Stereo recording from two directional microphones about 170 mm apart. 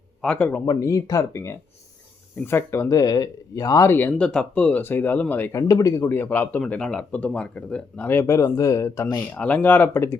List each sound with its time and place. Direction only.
0.2 s speech: 5° left (ahead or behind)
9.3 s speech: 10° left (ahead or behind)